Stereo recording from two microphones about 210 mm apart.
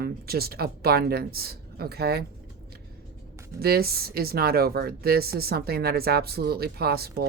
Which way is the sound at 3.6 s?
45° right (ahead or behind).